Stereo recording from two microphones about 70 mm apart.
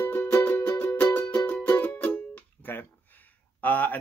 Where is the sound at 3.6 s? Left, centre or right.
Left.